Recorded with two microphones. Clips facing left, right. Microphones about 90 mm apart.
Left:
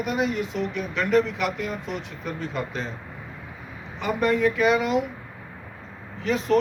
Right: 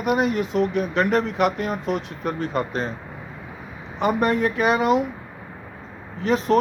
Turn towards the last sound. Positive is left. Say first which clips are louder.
# right 3 dB
turn(degrees=-40)  # may be behind; listen again after turning